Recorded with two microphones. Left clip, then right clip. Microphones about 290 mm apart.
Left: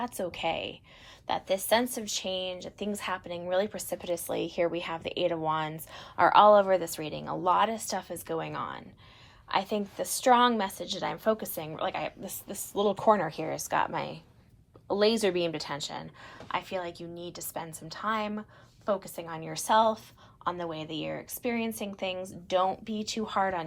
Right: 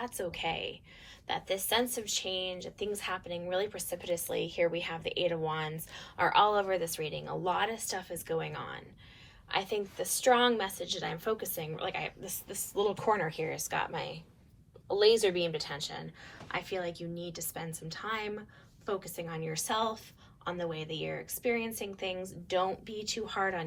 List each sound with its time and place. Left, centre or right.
0.0 s speech: centre
12.8 s speech: left
13.6 s speech: centre
13.9 s a woman's voice: left
14.9 s speech: left